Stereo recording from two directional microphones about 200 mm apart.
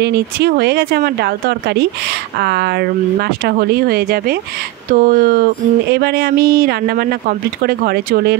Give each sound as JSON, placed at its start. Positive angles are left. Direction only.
{"t": 0.0, "sound": "speech", "side_deg": -55}